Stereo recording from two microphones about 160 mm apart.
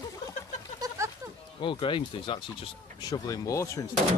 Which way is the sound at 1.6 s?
30° left (ahead or behind).